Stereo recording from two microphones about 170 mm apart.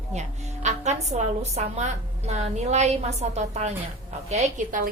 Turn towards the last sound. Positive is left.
turn(degrees=-50)  # may be behind; listen again after turning